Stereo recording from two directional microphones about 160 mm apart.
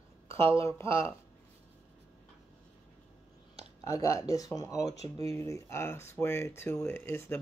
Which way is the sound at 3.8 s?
20° left (ahead or behind).